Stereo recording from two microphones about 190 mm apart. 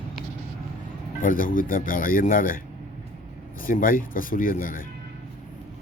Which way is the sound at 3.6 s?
45° left (ahead or behind).